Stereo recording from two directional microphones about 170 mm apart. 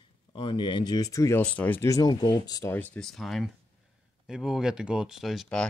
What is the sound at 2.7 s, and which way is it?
Speech, 10° left (ahead or behind).